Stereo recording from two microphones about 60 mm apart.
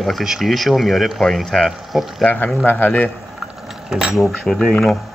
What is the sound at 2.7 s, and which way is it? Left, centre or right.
Speech, left.